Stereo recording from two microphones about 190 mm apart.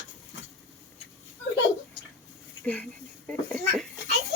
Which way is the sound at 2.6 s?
5° left (ahead or behind).